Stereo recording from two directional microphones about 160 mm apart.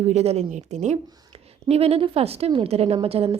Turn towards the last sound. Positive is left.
turn(degrees=-35)  # may be behind; listen again after turning